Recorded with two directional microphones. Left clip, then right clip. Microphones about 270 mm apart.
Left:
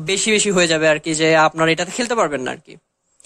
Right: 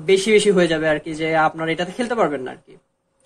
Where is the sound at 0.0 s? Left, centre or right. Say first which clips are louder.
Right 3 dB; left.